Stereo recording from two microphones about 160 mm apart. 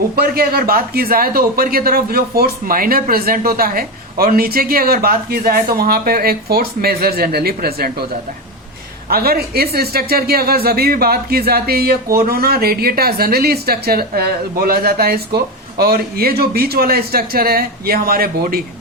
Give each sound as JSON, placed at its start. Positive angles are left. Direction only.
{"t": 0.2, "sound": "speech", "side_deg": -75}
{"t": 9.0, "sound": "speech", "side_deg": -75}